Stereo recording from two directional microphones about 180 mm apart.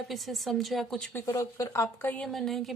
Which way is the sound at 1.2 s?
15° left (ahead or behind).